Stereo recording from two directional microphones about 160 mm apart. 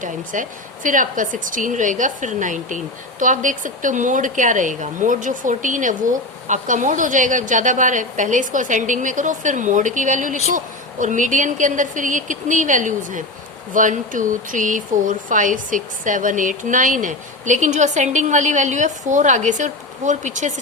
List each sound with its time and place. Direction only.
0.0 s a woman's voice: 55° right (ahead or behind)